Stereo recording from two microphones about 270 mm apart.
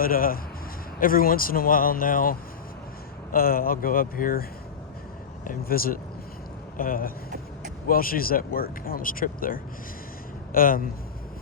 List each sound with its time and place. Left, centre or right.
0.0 s speech: left
5.5 s speech: left